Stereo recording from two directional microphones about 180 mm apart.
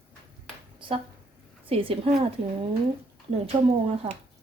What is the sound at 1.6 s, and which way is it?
Speech, 30° right (ahead or behind).